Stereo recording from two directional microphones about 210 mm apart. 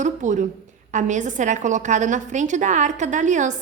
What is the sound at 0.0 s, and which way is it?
A woman's voice, 35° right (ahead or behind).